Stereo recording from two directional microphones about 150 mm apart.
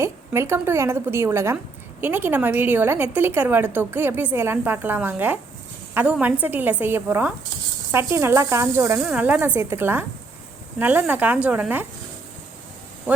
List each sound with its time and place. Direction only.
0.0 s a woman's voice: 15° right (ahead or behind)